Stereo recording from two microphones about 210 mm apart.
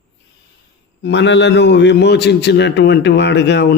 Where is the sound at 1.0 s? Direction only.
55° left (ahead or behind).